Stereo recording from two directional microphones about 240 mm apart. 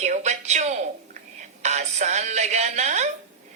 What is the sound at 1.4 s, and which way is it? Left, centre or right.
A woman's voice, right.